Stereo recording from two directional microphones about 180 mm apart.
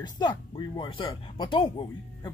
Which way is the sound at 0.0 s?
25° left (ahead or behind).